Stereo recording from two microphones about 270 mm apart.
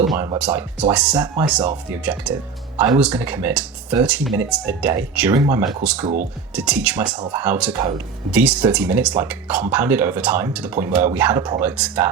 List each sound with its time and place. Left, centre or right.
0.1 s speech: centre
0.3 s speech: centre
1.1 s speech: centre
1.5 s speech: centre